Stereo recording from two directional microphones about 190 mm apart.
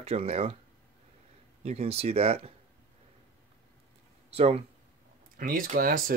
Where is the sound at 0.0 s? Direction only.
35° right (ahead or behind).